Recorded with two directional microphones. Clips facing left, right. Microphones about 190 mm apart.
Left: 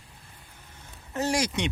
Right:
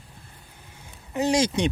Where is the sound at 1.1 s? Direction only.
20° right (ahead or behind).